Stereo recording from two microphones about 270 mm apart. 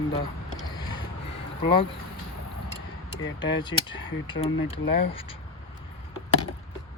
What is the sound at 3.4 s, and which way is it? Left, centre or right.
Speech, centre.